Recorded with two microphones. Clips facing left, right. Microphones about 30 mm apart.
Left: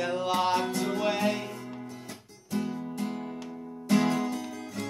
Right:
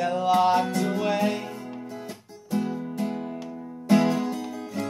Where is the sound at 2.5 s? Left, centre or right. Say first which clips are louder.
Right 4 dB; centre.